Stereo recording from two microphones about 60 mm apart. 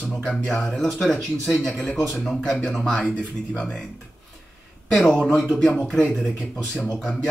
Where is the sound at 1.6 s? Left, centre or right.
Centre.